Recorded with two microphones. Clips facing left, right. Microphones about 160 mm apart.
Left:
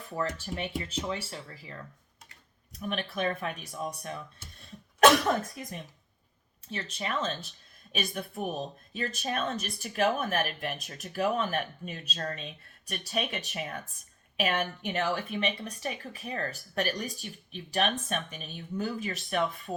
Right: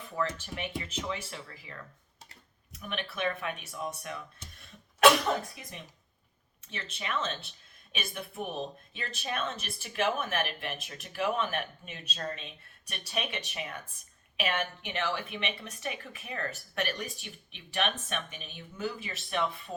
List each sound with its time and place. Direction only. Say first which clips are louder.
0.2 s a woman's voice: left 1 dB; 35° left (ahead or behind)
6.7 s a woman's voice: left 3 dB; 35° left (ahead or behind)